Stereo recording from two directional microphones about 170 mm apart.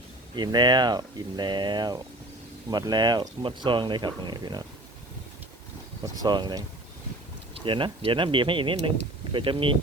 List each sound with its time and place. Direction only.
0.3 s speech: 25° right (ahead or behind)
6.1 s speech: 25° right (ahead or behind)